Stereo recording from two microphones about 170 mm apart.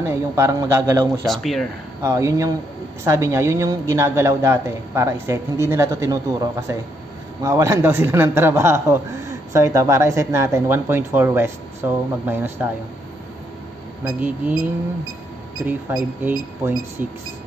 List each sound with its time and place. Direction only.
0.0 s a woman's voice: 15° right (ahead or behind)
1.2 s speech: centre (ahead or behind)
2.0 s a woman's voice: 15° right (ahead or behind)
15.9 s a woman's voice: 10° right (ahead or behind)